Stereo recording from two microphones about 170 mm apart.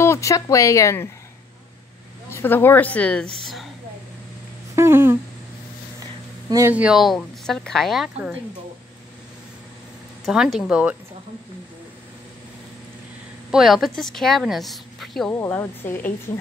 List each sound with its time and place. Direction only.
0.0 s speech: 15° left (ahead or behind)
2.2 s speech: 15° left (ahead or behind)
4.7 s a sound: 15° right (ahead or behind)
6.5 s speech: 10° right (ahead or behind)
10.2 s speech: centre (ahead or behind)
13.5 s speech: centre (ahead or behind)
15.3 s speech: 15° left (ahead or behind)